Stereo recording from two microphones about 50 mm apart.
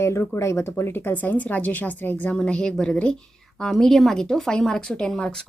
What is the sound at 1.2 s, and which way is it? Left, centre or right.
Speech, left.